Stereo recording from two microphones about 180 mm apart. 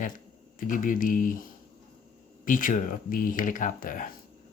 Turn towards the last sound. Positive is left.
turn(degrees=50)  # may be behind; listen again after turning